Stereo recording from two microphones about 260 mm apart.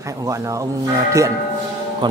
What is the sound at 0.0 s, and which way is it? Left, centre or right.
Speech, centre.